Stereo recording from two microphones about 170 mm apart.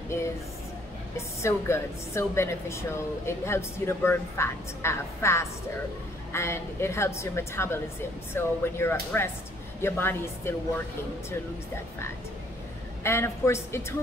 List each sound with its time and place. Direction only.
1.1 s speech: 15° left (ahead or behind)
13.0 s speech: 15° left (ahead or behind)